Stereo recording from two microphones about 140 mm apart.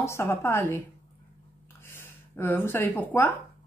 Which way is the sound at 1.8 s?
15° left (ahead or behind).